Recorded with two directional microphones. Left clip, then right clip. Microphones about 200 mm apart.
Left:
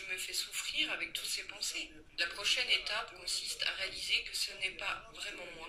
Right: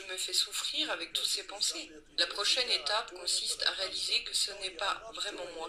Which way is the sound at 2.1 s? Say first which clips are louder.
Right 5 dB; 50° right (ahead or behind).